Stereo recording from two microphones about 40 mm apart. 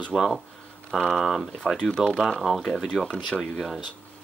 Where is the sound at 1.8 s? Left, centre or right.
Left.